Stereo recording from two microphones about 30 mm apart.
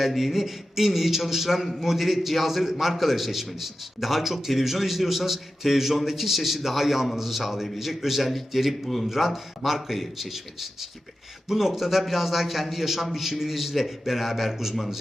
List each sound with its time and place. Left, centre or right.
0.0 s a man's voice: centre